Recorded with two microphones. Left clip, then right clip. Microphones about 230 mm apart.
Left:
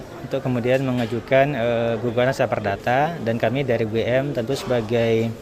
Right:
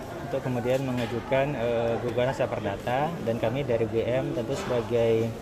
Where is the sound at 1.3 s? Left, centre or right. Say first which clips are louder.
Left 8 dB; left.